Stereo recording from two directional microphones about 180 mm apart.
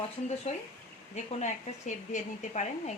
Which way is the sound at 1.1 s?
40° left (ahead or behind).